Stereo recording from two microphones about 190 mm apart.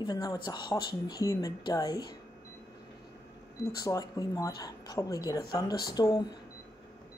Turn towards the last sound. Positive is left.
turn(degrees=20)  # may be behind; listen again after turning